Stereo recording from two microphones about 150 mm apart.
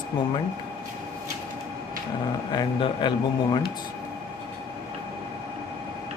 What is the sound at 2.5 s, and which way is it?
Speech, 30° left (ahead or behind).